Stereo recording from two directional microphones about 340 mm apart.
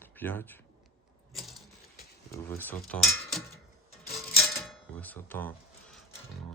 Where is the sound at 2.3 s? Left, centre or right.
Centre.